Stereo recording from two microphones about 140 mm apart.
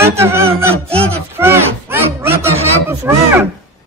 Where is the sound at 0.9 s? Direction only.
45° right (ahead or behind).